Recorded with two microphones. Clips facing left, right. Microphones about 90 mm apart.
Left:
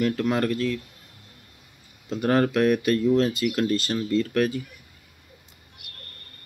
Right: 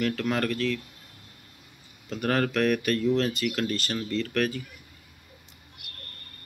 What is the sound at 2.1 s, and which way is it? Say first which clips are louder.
Speech: left 5 dB; 20° left (ahead or behind).